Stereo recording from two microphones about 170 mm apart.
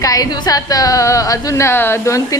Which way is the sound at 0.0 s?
20° left (ahead or behind).